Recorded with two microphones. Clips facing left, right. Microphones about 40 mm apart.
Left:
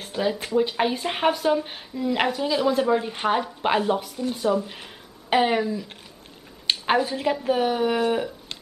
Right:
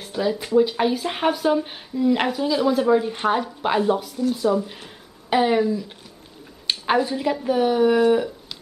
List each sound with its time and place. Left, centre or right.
0.0 s speech: centre
4.6 s a woman's voice: centre